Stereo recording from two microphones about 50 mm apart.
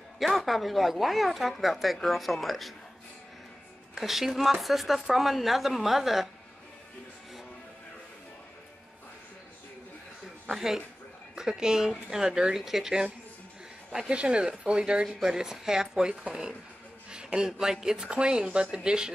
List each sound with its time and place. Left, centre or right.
0.2 s speech: centre
3.9 s speech: centre
10.5 s speech: centre